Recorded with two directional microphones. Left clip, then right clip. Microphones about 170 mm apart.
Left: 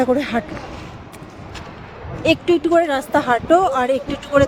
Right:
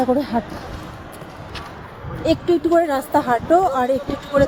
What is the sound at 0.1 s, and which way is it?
Speech, 30° left (ahead or behind).